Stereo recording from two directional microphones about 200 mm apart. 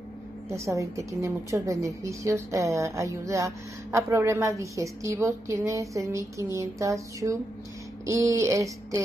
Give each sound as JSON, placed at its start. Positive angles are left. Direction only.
{"t": 0.5, "sound": "a woman's voice", "side_deg": -15}